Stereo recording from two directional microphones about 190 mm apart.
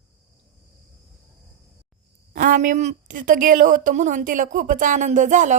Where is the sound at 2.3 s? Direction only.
45° right (ahead or behind).